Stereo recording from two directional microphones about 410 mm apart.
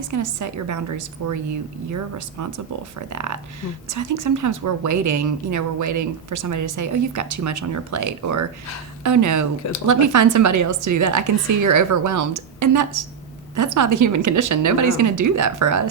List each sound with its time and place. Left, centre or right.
0.1 s a woman's voice: right